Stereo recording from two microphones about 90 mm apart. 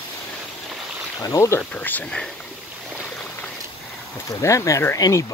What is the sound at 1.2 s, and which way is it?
Speech, 35° left (ahead or behind).